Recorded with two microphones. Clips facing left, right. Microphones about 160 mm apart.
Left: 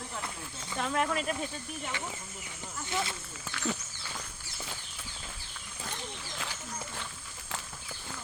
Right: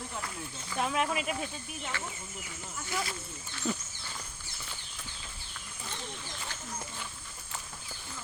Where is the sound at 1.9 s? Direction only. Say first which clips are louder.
Even; 15° left (ahead or behind).